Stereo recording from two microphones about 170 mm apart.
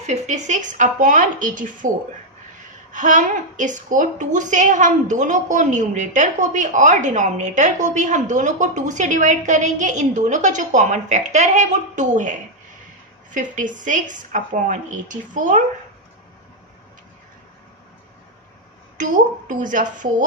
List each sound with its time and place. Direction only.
0.1 s a woman's voice: 45° right (ahead or behind)
2.9 s a woman's voice: 50° right (ahead or behind)
13.3 s a woman's voice: 50° right (ahead or behind)
19.5 s a woman's voice: 50° right (ahead or behind)